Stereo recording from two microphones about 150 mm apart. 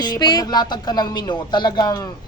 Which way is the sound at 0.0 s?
25° left (ahead or behind).